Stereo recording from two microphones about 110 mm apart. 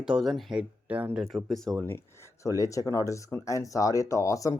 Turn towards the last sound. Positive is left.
turn(degrees=30)  # may be behind; listen again after turning